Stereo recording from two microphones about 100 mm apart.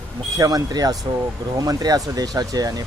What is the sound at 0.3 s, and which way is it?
Speech, 40° right (ahead or behind).